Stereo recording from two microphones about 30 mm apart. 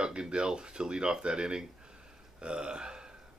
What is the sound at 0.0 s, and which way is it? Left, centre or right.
Speech, right.